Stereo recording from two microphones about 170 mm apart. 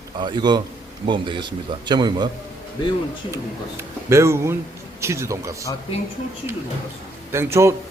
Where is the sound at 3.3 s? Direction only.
15° right (ahead or behind).